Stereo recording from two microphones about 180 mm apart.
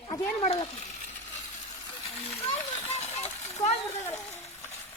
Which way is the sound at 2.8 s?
35° left (ahead or behind).